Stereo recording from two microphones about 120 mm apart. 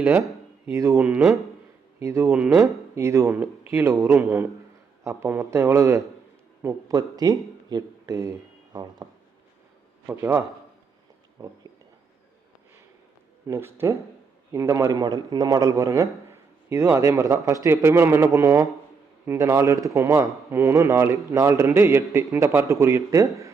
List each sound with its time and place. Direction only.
0.0 s a man's voice: 20° right (ahead or behind)
10.1 s a man's voice: 20° right (ahead or behind)
11.3 s a sound: 35° right (ahead or behind)
13.5 s a man's voice: 20° right (ahead or behind)